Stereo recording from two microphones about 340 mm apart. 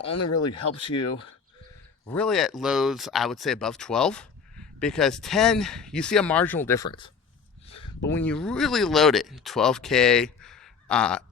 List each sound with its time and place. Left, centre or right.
0.0 s speech: left
0.8 s speech: centre
2.0 s speech: centre
8.1 s speech: centre